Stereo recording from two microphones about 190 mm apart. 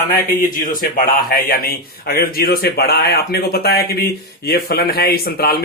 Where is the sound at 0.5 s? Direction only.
45° left (ahead or behind).